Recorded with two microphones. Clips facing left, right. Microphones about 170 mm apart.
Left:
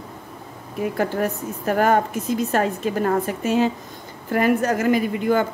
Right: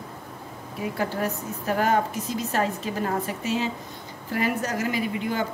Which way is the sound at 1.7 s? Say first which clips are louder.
Left 4 dB; 50° left (ahead or behind).